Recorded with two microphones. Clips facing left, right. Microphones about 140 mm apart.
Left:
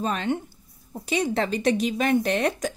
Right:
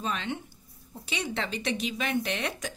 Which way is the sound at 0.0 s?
45° left (ahead or behind).